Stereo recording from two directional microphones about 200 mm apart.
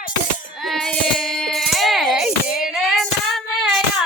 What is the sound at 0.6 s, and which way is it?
Child singing, centre (ahead or behind).